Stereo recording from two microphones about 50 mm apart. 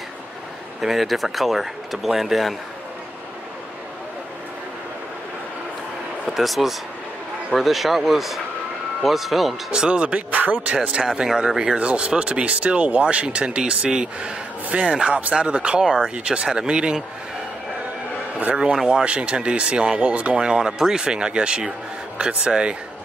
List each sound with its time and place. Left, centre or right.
0.7 s speech: centre
6.3 s speech: centre
9.7 s speech: centre
10.3 s speech: right; by 14.3 s centre
14.7 s speech: right
18.9 s speech: right
20.3 s speech: centre